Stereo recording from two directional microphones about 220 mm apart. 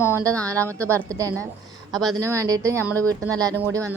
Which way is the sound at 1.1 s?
15° right (ahead or behind).